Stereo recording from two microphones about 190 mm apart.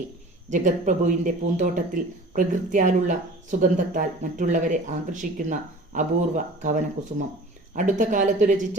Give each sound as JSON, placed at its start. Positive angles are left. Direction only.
{"t": 0.5, "sound": "speech", "side_deg": -40}